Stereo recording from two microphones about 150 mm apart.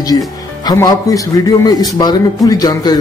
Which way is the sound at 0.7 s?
25° left (ahead or behind).